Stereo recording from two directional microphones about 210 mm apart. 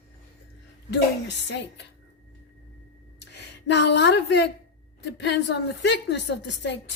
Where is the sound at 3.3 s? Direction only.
55° left (ahead or behind).